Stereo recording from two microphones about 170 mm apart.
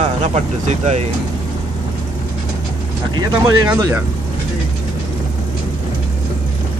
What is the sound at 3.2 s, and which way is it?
Speech, 20° right (ahead or behind).